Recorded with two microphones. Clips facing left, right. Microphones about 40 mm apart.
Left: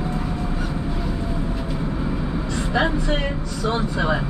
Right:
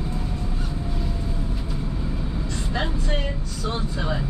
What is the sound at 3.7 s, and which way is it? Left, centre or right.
Vehicle, left.